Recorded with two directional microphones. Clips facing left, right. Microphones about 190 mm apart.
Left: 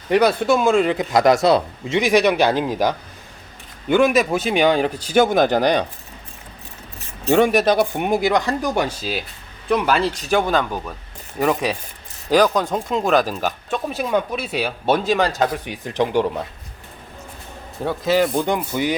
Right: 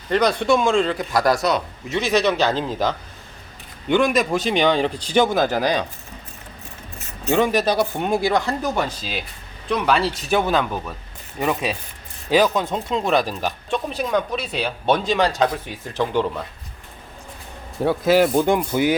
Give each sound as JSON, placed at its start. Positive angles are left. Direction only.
{"t": 0.1, "sound": "speech", "side_deg": 5}
{"t": 0.9, "sound": "a man's voice", "side_deg": 20}
{"t": 2.0, "sound": "speech", "side_deg": 15}
{"t": 5.5, "sound": "speech", "side_deg": 70}
{"t": 7.5, "sound": "speech", "side_deg": 15}
{"t": 10.0, "sound": "speech", "side_deg": -5}
{"t": 15.5, "sound": "speech", "side_deg": 15}
{"t": 17.8, "sound": "speech", "side_deg": -10}